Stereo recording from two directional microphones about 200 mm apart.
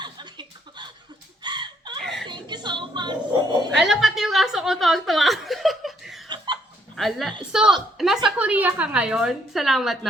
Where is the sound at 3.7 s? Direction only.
Centre (ahead or behind).